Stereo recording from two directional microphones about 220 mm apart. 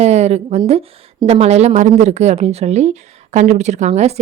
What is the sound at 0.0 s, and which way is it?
A woman's voice, 30° right (ahead or behind).